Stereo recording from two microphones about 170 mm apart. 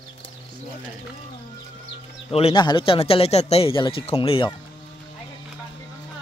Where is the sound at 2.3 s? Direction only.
35° left (ahead or behind).